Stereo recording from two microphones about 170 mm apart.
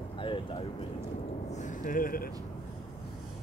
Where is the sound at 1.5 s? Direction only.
50° left (ahead or behind).